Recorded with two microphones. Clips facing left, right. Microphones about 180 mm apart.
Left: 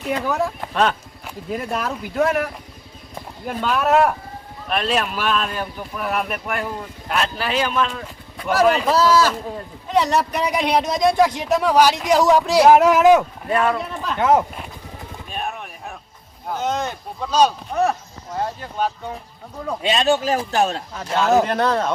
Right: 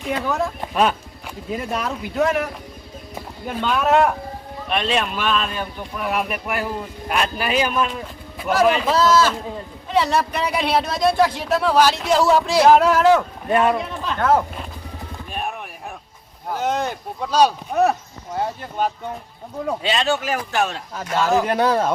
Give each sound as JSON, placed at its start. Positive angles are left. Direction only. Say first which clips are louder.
{"t": 0.0, "sound": "speech", "louder": "left 1 dB", "side_deg": -5}
{"t": 0.3, "sound": "speech", "louder": "left 1 dB", "side_deg": 5}
{"t": 0.7, "sound": "a man's voice", "louder": "right 3 dB", "side_deg": -10}
{"t": 13.5, "sound": "speech", "louder": "right 2 dB", "side_deg": -25}
{"t": 14.0, "sound": "speech", "louder": "left 2 dB", "side_deg": 10}
{"t": 16.5, "sound": "a man's voice", "louder": "right 1 dB", "side_deg": -10}
{"t": 19.8, "sound": "speech", "louder": "left 5 dB", "side_deg": 20}
{"t": 20.9, "sound": "a man's voice", "louder": "left 1 dB", "side_deg": -5}